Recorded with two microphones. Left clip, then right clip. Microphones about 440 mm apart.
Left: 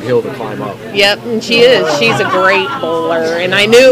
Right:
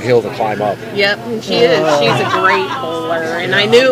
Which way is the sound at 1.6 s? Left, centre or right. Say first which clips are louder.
Left 2 dB; left.